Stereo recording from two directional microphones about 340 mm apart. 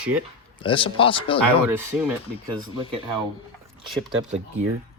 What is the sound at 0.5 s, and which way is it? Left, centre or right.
Speech, centre.